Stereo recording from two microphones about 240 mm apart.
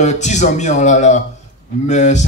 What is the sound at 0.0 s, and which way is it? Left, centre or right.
A man's voice, left.